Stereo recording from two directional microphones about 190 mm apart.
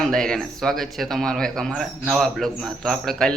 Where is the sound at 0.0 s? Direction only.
5° left (ahead or behind).